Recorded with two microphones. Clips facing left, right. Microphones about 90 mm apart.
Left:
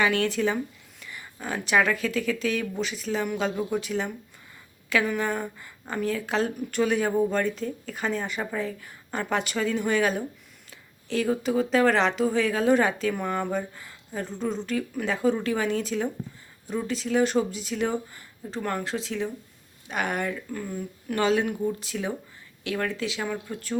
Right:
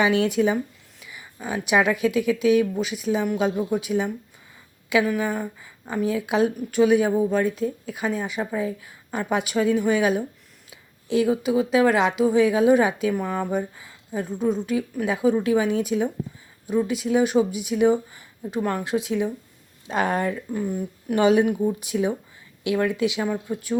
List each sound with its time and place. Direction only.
0.0 s speech: 15° right (ahead or behind)
19.9 s speech: 25° right (ahead or behind)
20.5 s speech: 15° right (ahead or behind)